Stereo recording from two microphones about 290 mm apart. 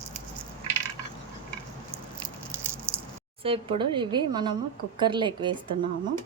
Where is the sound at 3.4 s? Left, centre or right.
Centre.